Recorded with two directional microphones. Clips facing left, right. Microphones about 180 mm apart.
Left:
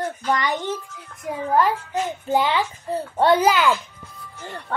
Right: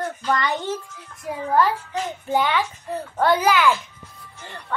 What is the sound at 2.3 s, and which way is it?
A child's voice, 20° left (ahead or behind).